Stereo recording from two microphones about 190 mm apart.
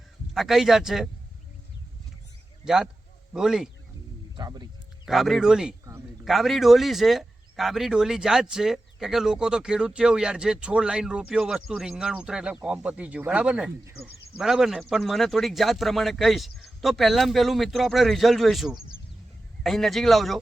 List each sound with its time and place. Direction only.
0.3 s speech: centre (ahead or behind)
2.6 s speech: 5° right (ahead or behind)
4.4 s a sound: 25° right (ahead or behind)
5.0 s speech: centre (ahead or behind)
14.3 s speech: centre (ahead or behind)